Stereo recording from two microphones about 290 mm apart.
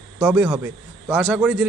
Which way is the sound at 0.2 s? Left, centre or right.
Centre.